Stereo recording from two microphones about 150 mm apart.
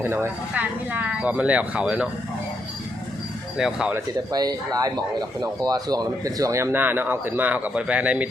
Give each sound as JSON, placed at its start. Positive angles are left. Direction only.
{"t": 0.0, "sound": "speech", "side_deg": -15}
{"t": 3.6, "sound": "speech", "side_deg": -5}
{"t": 4.3, "sound": "speech", "side_deg": -25}